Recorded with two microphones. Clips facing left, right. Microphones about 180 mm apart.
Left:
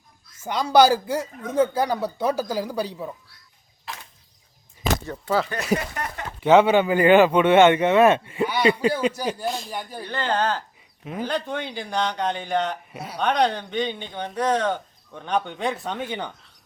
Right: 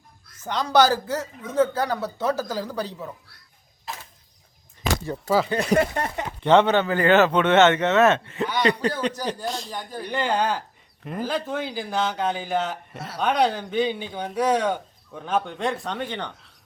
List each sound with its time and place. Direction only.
0.4 s a man's voice: 10° left (ahead or behind)
5.5 s speech: 25° right (ahead or behind)
6.4 s a man's voice: 10° left (ahead or behind)
10.0 s speech: 15° right (ahead or behind)
11.0 s speech: centre (ahead or behind)